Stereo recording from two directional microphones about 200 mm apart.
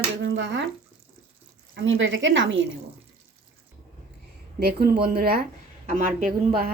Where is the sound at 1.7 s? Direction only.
65° right (ahead or behind).